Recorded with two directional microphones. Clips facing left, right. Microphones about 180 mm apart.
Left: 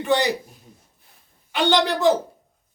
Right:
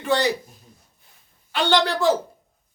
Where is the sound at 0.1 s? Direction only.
15° left (ahead or behind).